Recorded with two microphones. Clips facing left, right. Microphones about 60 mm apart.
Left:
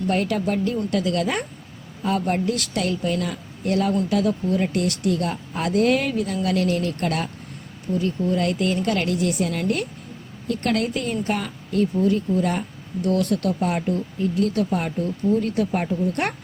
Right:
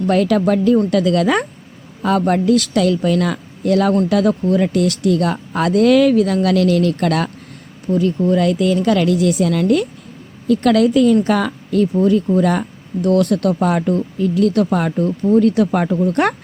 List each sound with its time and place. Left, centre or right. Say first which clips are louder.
0.1 s speech: right 8 dB; right
10.7 s speech: right 12 dB; right